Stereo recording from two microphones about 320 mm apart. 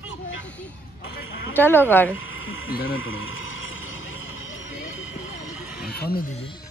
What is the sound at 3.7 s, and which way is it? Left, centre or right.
Horse, left.